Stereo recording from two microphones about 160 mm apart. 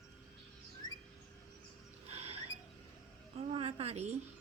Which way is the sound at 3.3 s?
40° right (ahead or behind).